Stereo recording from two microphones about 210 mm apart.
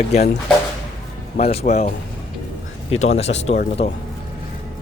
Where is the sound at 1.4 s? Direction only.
30° left (ahead or behind).